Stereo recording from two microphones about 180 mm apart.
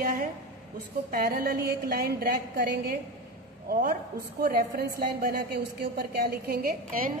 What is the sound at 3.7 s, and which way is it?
Speech, 50° right (ahead or behind).